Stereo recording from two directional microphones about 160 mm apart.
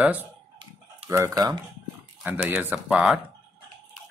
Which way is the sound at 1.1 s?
20° right (ahead or behind).